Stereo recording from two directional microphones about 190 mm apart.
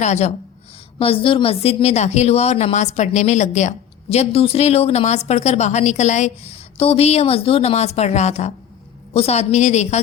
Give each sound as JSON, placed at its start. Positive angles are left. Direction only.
{"t": 0.0, "sound": "speech", "side_deg": 35}